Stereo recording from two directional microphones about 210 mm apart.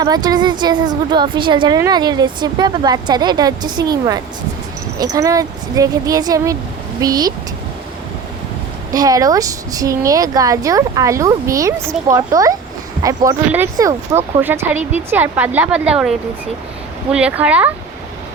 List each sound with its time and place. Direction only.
0.0 s speech: 20° right (ahead or behind)
8.9 s speech: 15° right (ahead or behind)